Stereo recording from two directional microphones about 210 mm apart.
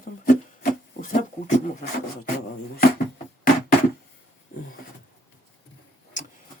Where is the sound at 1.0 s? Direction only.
35° left (ahead or behind).